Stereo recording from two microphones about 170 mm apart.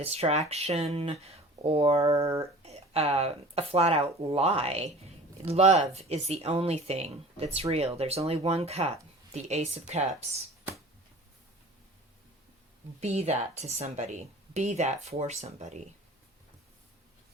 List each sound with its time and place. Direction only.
0.0 s speech: 40° right (ahead or behind)
2.2 s speech: 15° right (ahead or behind)
2.6 s speech: 35° right (ahead or behind)
13.0 s speech: 40° right (ahead or behind)